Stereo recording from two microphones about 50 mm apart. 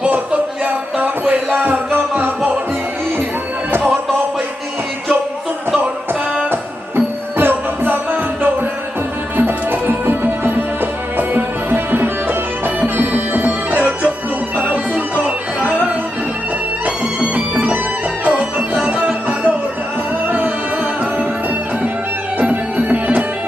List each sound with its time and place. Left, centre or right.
0.6 s music: right
1.3 s a sound: right
3.7 s music: right
6.5 s music: right
20.2 s music: right
22.4 s music: right